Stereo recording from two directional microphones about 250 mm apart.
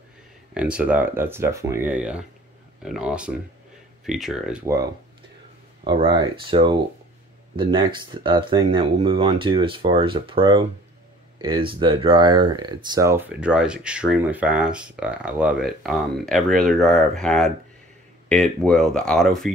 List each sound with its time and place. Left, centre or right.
0.6 s speech: centre
5.9 s speech: centre